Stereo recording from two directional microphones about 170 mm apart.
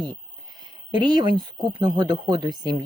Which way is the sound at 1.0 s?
25° right (ahead or behind).